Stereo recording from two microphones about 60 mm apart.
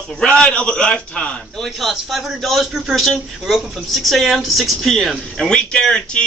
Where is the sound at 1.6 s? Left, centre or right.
Centre.